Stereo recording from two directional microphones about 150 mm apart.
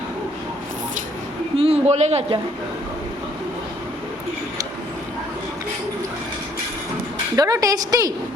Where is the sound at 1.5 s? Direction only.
40° right (ahead or behind).